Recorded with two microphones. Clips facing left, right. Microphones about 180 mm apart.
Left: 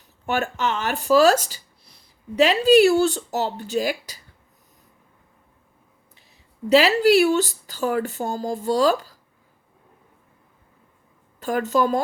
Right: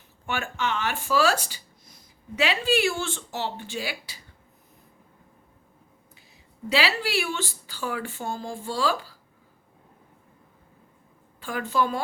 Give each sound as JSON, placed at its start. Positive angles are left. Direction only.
{"t": 0.3, "sound": "speech", "side_deg": 40}
{"t": 6.7, "sound": "speech", "side_deg": 45}
{"t": 11.3, "sound": "a woman's voice", "side_deg": 45}